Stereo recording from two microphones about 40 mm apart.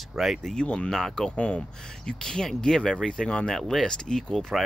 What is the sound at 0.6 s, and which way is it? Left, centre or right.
Speech, left.